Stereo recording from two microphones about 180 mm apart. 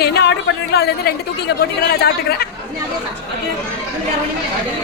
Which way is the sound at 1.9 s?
60° left (ahead or behind).